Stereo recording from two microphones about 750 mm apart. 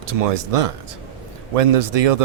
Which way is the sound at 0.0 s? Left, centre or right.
Right.